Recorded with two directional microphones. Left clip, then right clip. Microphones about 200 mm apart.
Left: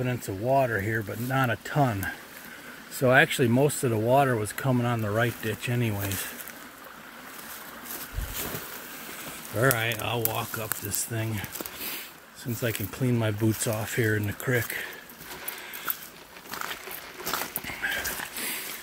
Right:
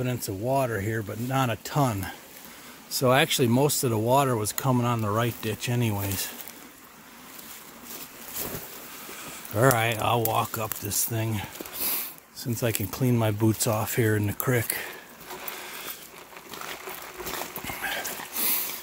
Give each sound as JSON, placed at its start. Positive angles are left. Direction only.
{"t": 0.0, "sound": "speech", "side_deg": -20}
{"t": 9.6, "sound": "speech", "side_deg": -45}
{"t": 17.6, "sound": "a sound", "side_deg": -30}